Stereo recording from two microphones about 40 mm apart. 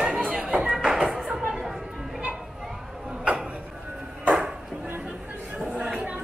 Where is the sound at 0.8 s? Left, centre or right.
Centre.